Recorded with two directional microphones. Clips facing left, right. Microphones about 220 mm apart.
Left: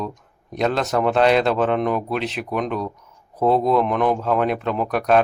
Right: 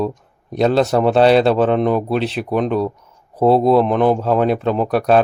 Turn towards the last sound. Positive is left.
turn(degrees=-30)  # may be behind; listen again after turning